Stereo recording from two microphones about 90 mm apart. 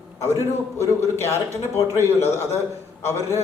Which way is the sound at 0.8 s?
30° left (ahead or behind).